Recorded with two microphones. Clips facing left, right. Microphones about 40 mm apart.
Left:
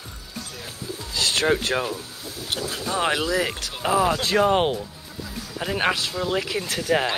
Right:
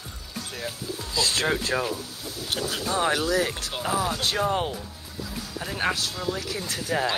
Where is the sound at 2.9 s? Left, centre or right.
Left.